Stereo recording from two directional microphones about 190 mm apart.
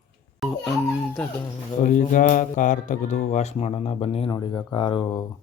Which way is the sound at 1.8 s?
45° left (ahead or behind).